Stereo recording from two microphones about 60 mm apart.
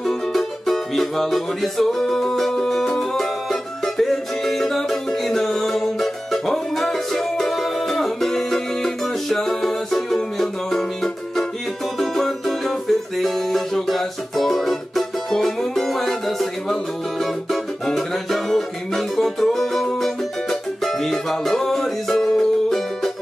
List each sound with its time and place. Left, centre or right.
0.0 s music: centre